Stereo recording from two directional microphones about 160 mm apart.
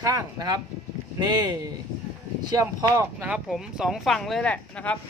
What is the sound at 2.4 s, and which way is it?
Speech, 25° right (ahead or behind).